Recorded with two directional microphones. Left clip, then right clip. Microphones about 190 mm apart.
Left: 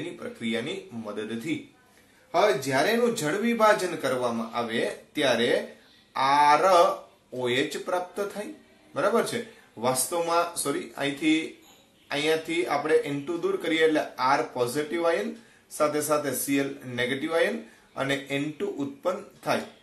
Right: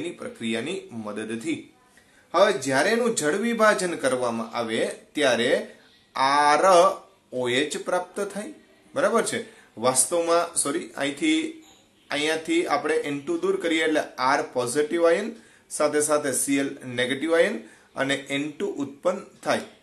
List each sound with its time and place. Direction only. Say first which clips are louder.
0.2 s speech: left 1 dB; 45° right (ahead or behind)
2.6 s speech: right 2 dB; 45° right (ahead or behind)